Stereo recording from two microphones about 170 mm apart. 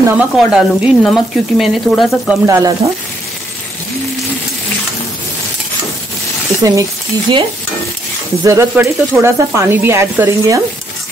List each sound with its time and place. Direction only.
0.2 s speech: 5° right (ahead or behind)
2.4 s speech: 20° right (ahead or behind)
6.6 s speech: 20° right (ahead or behind)
8.5 s speech: 15° right (ahead or behind)